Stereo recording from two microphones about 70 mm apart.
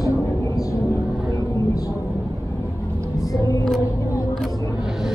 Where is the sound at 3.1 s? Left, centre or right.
Left.